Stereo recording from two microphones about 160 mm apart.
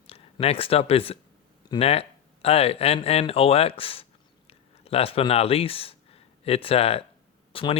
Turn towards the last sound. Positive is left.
turn(degrees=35)  # may be behind; listen again after turning